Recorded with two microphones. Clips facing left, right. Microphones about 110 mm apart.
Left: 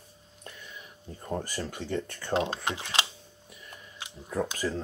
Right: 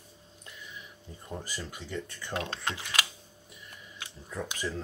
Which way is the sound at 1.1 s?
45° left (ahead or behind).